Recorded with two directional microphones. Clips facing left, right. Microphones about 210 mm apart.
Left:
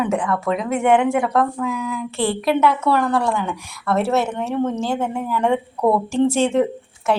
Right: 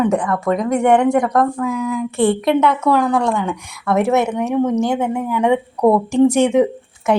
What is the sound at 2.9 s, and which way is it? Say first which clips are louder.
Speech: right 3 dB; 15° right (ahead or behind).